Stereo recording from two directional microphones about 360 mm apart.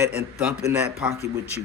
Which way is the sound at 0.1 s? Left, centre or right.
Right.